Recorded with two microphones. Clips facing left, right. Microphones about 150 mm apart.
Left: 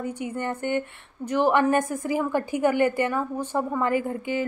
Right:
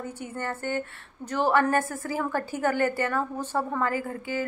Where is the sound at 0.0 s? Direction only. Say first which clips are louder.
Left 4 dB; 15° left (ahead or behind).